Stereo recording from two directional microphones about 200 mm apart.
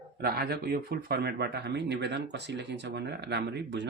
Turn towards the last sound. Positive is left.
turn(degrees=-55)  # may be behind; listen again after turning